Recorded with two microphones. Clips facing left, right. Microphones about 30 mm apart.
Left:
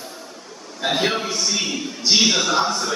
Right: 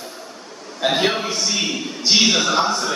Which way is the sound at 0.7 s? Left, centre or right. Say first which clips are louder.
Right 2 dB; centre.